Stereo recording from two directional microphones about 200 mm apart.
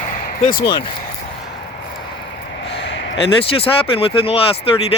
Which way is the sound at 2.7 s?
65° left (ahead or behind).